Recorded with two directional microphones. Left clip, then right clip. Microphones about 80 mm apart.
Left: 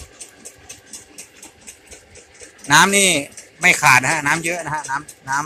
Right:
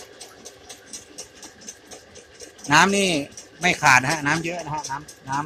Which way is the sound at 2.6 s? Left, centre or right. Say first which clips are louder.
Left 4 dB; centre.